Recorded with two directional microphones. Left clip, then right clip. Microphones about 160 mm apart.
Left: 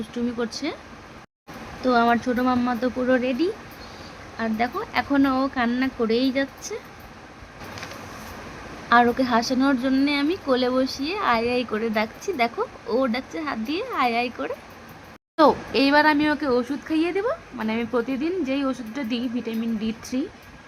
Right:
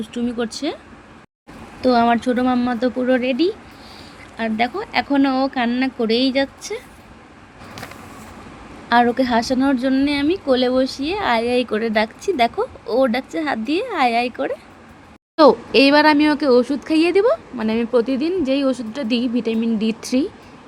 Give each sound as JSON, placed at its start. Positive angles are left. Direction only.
{"t": 0.3, "sound": "a woman's voice", "side_deg": -25}
{"t": 1.8, "sound": "a woman's voice", "side_deg": -30}
{"t": 8.9, "sound": "a woman's voice", "side_deg": -25}
{"t": 17.6, "sound": "speech", "side_deg": -35}